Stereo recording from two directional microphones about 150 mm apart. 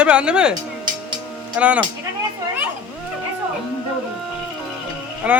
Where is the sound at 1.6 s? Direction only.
10° right (ahead or behind).